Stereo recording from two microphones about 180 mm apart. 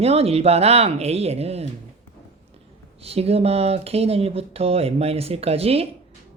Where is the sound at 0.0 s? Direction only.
35° right (ahead or behind).